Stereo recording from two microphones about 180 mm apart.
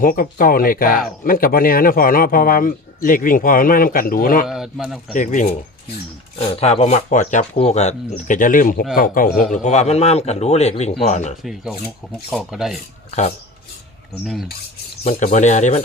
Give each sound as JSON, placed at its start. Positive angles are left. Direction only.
{"t": 0.0, "sound": "a man's voice", "side_deg": 50}
{"t": 4.4, "sound": "speech", "side_deg": -5}
{"t": 5.1, "sound": "a man's voice", "side_deg": 45}
{"t": 6.4, "sound": "a man's voice", "side_deg": 35}
{"t": 9.5, "sound": "speech", "side_deg": 40}
{"t": 12.3, "sound": "speech", "side_deg": -5}
{"t": 15.0, "sound": "speech", "side_deg": 40}